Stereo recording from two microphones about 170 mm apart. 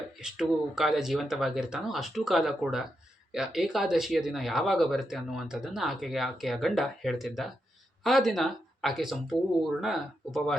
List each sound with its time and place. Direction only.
0.2 s speech: 5° right (ahead or behind)